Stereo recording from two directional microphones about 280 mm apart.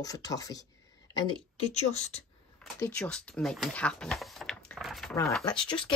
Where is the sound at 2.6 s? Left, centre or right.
Centre.